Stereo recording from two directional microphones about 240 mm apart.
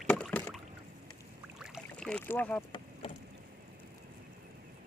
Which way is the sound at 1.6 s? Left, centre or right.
Centre.